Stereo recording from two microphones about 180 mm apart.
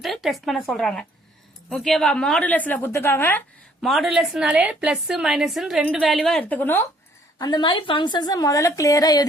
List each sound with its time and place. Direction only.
0.0 s a woman's voice: centre (ahead or behind)
3.8 s a woman's voice: centre (ahead or behind)
7.3 s a woman's voice: 20° left (ahead or behind)